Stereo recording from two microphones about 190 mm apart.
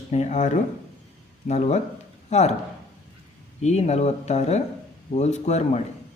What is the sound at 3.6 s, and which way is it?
Speech, 35° left (ahead or behind).